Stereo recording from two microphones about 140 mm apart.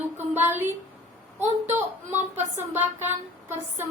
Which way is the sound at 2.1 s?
60° right (ahead or behind).